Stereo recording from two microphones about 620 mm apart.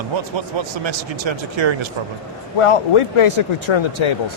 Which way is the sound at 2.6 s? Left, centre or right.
Left.